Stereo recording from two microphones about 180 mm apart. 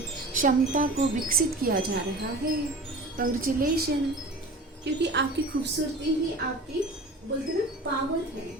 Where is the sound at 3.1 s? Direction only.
50° right (ahead or behind).